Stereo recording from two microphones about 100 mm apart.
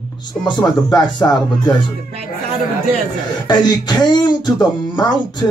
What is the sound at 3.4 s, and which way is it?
Speech, 45° left (ahead or behind).